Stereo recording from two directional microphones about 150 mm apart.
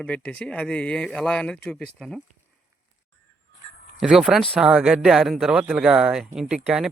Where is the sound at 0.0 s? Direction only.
10° left (ahead or behind).